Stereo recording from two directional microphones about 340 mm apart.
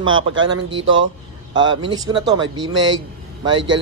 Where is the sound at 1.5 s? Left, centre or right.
Centre.